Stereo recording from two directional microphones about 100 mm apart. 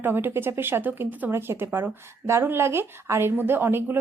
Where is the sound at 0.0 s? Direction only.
20° right (ahead or behind).